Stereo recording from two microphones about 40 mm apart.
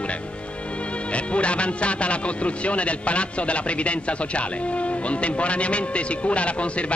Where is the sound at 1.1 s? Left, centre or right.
Left.